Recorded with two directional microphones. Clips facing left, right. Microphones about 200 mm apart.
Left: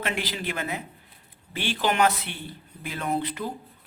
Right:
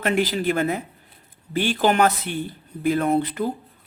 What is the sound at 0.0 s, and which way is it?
Speech, 45° right (ahead or behind).